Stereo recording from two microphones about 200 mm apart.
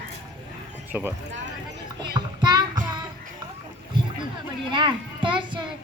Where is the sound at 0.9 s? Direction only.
10° right (ahead or behind).